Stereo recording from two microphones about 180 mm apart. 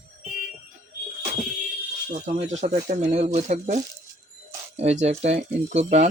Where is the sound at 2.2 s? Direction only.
40° right (ahead or behind).